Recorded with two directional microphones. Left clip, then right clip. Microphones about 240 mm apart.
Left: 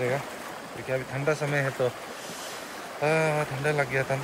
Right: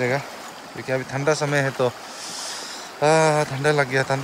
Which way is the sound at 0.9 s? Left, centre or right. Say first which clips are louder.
Right 6 dB; right.